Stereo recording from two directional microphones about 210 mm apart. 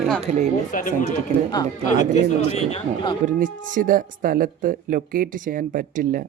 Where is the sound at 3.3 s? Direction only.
40° right (ahead or behind).